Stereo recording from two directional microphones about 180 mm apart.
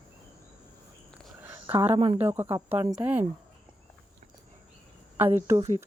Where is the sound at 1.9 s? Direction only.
30° right (ahead or behind).